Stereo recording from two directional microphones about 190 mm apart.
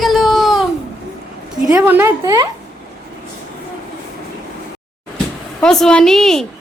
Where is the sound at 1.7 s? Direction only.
15° right (ahead or behind).